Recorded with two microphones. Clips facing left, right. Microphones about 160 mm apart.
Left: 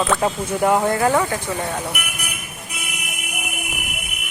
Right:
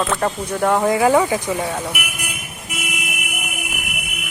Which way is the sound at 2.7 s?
90° right.